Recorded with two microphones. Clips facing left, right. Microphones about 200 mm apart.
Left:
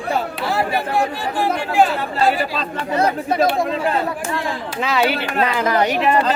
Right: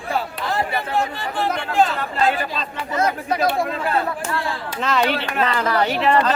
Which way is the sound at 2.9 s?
30° left (ahead or behind).